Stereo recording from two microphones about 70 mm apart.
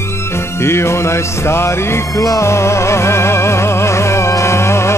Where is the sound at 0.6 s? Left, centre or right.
Left.